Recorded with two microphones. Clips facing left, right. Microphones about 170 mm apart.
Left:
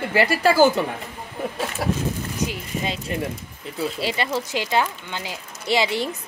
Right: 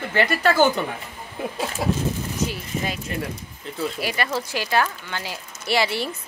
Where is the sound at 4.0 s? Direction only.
25° left (ahead or behind).